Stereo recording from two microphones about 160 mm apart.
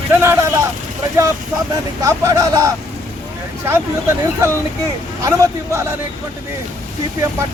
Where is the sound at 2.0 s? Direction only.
20° right (ahead or behind).